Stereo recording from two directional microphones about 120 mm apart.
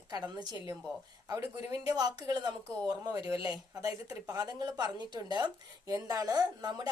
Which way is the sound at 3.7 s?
30° right (ahead or behind).